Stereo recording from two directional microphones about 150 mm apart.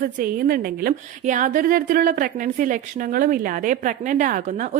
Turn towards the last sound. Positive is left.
turn(degrees=-55)  # may be behind; listen again after turning